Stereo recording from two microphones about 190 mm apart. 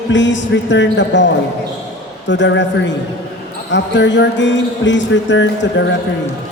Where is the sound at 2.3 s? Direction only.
70° left (ahead or behind).